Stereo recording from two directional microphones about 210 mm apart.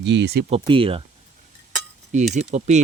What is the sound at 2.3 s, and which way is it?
Speech, 35° right (ahead or behind).